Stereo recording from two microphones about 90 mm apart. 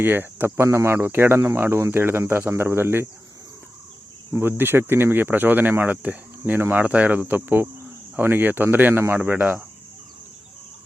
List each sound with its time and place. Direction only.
0.0 s speech: 25° right (ahead or behind)
4.3 s speech: 25° right (ahead or behind)